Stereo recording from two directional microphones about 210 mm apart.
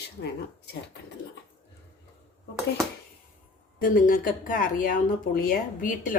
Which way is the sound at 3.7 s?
40° left (ahead or behind).